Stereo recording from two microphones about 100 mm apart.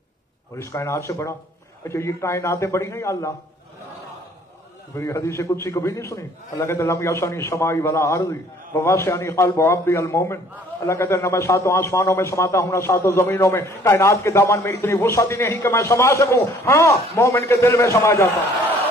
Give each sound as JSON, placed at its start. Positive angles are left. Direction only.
{"t": 0.6, "sound": "a man's voice", "side_deg": 30}
{"t": 4.9, "sound": "a man's voice", "side_deg": 30}